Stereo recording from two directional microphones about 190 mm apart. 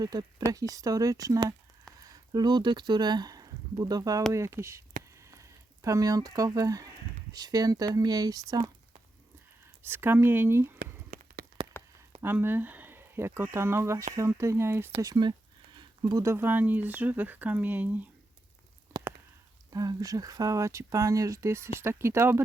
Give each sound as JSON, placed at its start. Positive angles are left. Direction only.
{"t": 0.0, "sound": "speech", "side_deg": -20}
{"t": 5.1, "sound": "frying", "side_deg": -15}
{"t": 7.3, "sound": "speech", "side_deg": -20}
{"t": 9.8, "sound": "speech", "side_deg": -10}
{"t": 10.8, "sound": "a sound", "side_deg": -50}
{"t": 12.2, "sound": "speech", "side_deg": -10}
{"t": 18.9, "sound": "a sound", "side_deg": -10}
{"t": 19.7, "sound": "speech", "side_deg": -20}